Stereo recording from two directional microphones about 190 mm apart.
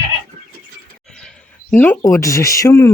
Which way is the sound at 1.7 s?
10° left (ahead or behind).